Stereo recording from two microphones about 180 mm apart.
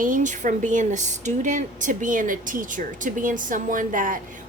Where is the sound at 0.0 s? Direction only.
45° right (ahead or behind).